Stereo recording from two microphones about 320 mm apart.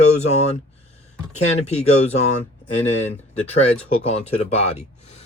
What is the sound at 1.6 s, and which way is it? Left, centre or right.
Speech, centre.